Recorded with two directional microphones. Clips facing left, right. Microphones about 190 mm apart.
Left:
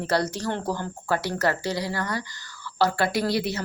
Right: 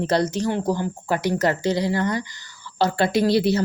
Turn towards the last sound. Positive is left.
turn(degrees=-30)  # may be behind; listen again after turning